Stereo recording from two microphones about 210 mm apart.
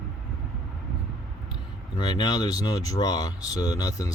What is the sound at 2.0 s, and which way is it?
Speech, 20° left (ahead or behind).